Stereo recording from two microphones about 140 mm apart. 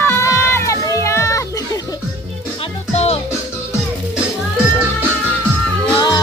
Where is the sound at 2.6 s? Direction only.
50° left (ahead or behind).